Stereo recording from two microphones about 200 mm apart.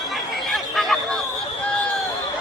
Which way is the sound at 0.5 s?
Centre (ahead or behind).